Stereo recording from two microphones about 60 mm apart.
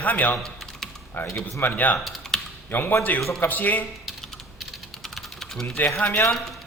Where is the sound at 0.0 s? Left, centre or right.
Left.